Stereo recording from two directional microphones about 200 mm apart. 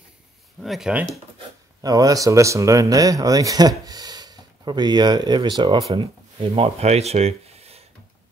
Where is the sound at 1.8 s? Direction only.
20° right (ahead or behind).